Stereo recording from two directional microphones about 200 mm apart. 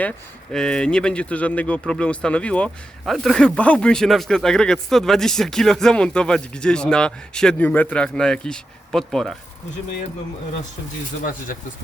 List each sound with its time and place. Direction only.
0.5 s speech: 5° left (ahead or behind)
11.2 s speech: 45° left (ahead or behind)